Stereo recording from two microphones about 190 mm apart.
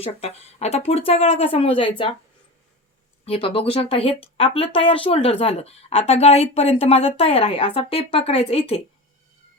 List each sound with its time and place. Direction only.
0.0 s speech: 35° left (ahead or behind)
3.2 s speech: 30° left (ahead or behind)